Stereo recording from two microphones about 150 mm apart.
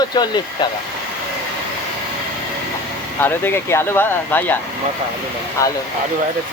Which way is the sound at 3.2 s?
15° left (ahead or behind).